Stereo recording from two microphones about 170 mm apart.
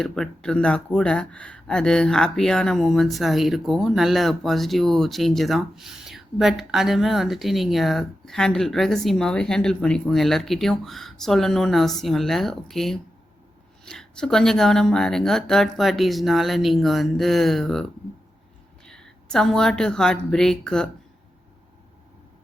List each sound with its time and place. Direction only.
0.0 s speech: 5° left (ahead or behind)
18.9 s speech: 5° left (ahead or behind)